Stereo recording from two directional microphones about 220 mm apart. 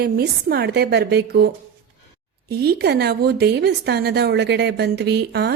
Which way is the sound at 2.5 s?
45° right (ahead or behind).